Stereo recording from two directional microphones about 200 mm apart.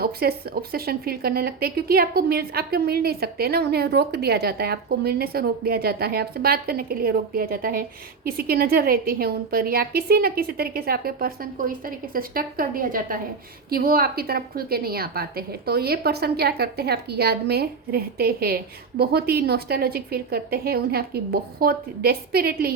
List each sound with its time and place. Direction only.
0.0 s a woman's voice: 50° right (ahead or behind)